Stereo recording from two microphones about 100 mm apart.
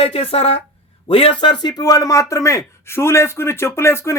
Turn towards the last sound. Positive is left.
turn(degrees=25)  # may be behind; listen again after turning